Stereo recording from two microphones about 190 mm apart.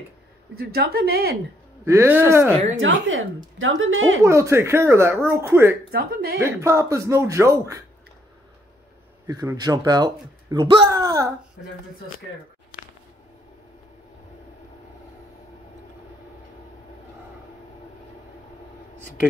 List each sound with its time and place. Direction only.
0.6 s a woman's voice: 55° right (ahead or behind)
1.9 s speech: 10° right (ahead or behind)
2.7 s speech: 90° right
4.2 s speech: 15° right (ahead or behind)
5.9 s a woman's voice: 55° right (ahead or behind)
6.4 s speech: 15° right (ahead or behind)
9.3 s speech: 20° right (ahead or behind)